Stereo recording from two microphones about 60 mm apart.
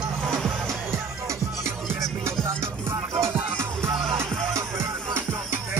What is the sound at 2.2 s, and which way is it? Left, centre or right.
Music, right.